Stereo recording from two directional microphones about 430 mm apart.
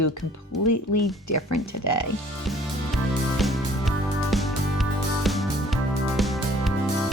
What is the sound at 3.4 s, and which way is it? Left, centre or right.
Music, centre.